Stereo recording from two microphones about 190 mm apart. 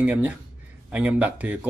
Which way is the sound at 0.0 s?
5° right (ahead or behind).